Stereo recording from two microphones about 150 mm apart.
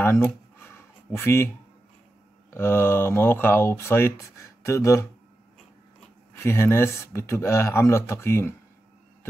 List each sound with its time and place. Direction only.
0.0 s a sound: 15° left (ahead or behind)
2.5 s speech: 15° left (ahead or behind)
6.3 s speech: 15° left (ahead or behind)